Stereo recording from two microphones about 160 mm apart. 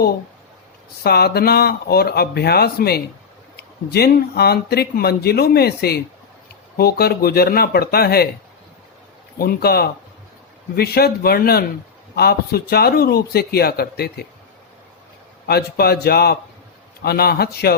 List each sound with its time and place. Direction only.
1.0 s a man's voice: 80° left
9.4 s a man's voice: 70° left (ahead or behind)
15.4 s a man's voice: 80° left